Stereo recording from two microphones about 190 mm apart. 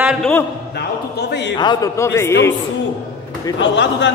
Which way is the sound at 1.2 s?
65° left (ahead or behind).